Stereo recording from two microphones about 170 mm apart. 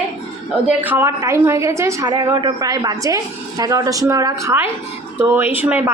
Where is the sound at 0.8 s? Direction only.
10° right (ahead or behind).